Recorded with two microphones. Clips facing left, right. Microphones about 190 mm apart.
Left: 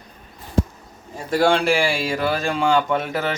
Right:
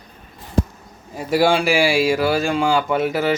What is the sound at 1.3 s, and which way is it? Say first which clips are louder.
Speech: right 1 dB; 5° right (ahead or behind).